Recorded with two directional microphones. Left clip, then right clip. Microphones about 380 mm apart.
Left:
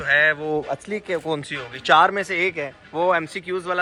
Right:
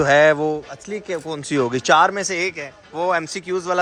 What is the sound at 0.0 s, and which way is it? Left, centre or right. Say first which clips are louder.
A man's voice: right 4 dB; centre.